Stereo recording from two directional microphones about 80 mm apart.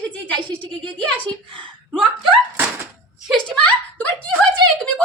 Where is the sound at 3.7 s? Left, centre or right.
Centre.